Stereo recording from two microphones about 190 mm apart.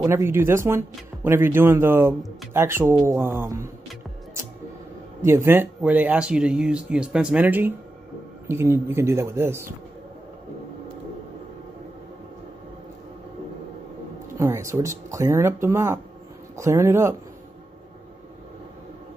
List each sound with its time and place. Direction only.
0.0 s speech: 15° right (ahead or behind)
5.2 s speech: 15° right (ahead or behind)
14.4 s speech: 15° right (ahead or behind)